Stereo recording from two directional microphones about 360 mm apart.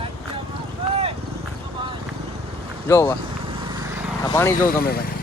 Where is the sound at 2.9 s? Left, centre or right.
Centre.